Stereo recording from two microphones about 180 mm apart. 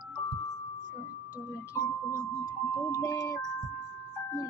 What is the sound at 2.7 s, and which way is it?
Speech, 15° left (ahead or behind).